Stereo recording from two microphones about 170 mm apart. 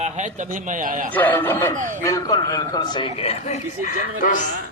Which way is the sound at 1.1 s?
10° left (ahead or behind).